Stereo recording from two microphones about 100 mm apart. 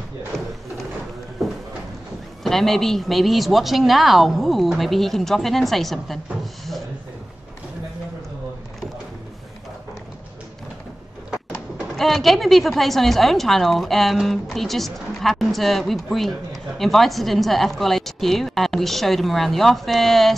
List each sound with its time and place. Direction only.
0.3 s a sound: 5° left (ahead or behind)
2.4 s a woman's voice: 5° left (ahead or behind)
12.0 s a woman's voice: centre (ahead or behind)